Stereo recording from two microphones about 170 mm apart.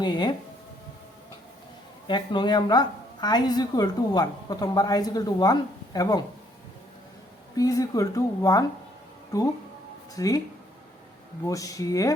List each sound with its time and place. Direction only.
0.0 s a woman's voice: 25° left (ahead or behind)
2.0 s a woman's voice: 25° left (ahead or behind)
7.5 s a woman's voice: 20° left (ahead or behind)
10.2 s a woman's voice: 20° left (ahead or behind)
11.4 s a woman's voice: 20° left (ahead or behind)